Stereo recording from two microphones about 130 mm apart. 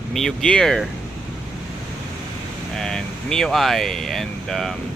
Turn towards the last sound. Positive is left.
turn(degrees=5)  # may be behind; listen again after turning